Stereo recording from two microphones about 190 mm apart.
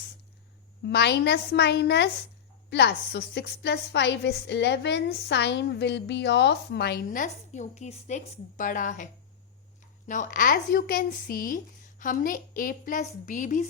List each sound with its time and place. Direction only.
0.9 s a woman's voice: 60° left (ahead or behind); by 9.0 s 45° left (ahead or behind)
10.1 s speech: 45° left (ahead or behind)